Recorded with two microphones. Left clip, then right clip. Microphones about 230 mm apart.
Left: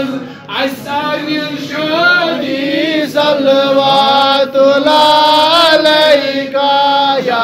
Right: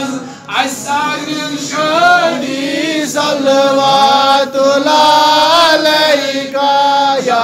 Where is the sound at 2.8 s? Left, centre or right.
Right.